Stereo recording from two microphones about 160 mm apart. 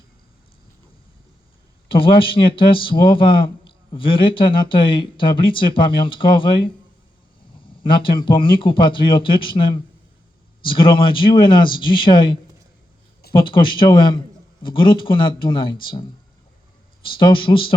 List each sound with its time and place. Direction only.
1.9 s speech: 35° left (ahead or behind)
7.9 s speech: 30° left (ahead or behind)
17.1 s speech: 30° left (ahead or behind)